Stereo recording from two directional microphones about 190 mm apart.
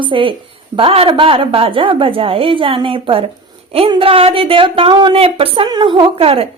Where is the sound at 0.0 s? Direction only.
25° right (ahead or behind).